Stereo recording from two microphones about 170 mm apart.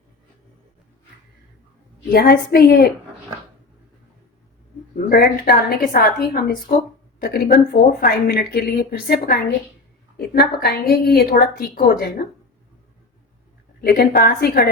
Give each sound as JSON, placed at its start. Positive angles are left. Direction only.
{"t": 2.1, "sound": "a woman's voice", "side_deg": 60}
{"t": 4.9, "sound": "a woman's voice", "side_deg": 60}
{"t": 13.8, "sound": "a woman's voice", "side_deg": 65}